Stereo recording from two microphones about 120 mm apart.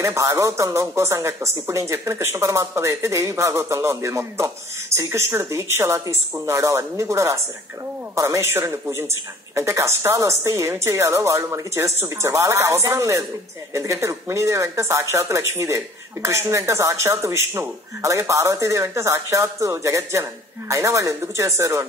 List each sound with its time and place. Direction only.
0.0 s speech: 25° right (ahead or behind)